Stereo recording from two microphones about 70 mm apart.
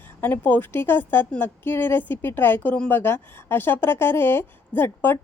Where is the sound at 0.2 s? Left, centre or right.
Left.